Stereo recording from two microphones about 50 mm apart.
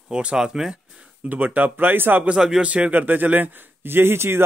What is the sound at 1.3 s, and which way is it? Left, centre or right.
Speech, right.